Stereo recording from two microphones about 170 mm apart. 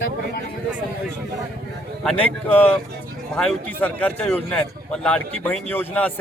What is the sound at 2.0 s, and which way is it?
A man's voice, 5° left (ahead or behind).